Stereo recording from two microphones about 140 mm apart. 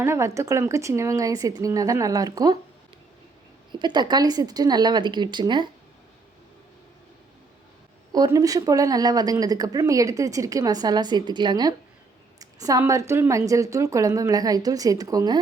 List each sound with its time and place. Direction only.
0.0 s a woman's voice: 20° right (ahead or behind)
3.7 s a woman's voice: 35° right (ahead or behind)
8.1 s a woman's voice: 25° right (ahead or behind)
12.4 s a sound: 25° right (ahead or behind)
12.8 s a woman's voice: 20° right (ahead or behind)